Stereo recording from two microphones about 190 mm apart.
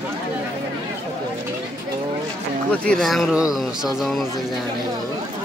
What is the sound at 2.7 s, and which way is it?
Speech, 5° left (ahead or behind).